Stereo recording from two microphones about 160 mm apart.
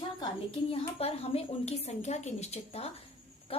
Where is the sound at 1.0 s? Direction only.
40° left (ahead or behind).